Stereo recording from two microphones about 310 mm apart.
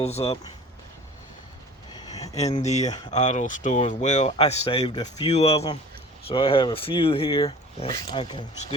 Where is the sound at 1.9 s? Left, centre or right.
Centre.